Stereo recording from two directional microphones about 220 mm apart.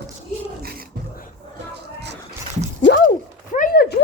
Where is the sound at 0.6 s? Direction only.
45° right (ahead or behind).